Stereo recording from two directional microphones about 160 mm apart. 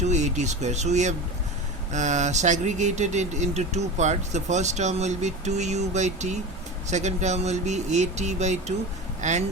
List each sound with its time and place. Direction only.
0.1 s speech: 45° right (ahead or behind)